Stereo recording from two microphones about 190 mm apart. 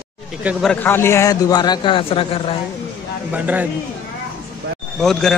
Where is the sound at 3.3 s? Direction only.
10° right (ahead or behind).